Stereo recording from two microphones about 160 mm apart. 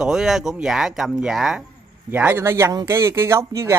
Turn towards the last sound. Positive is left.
turn(degrees=-20)  # may be behind; listen again after turning